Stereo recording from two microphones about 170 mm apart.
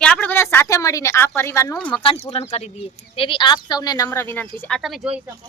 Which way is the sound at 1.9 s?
30° left (ahead or behind).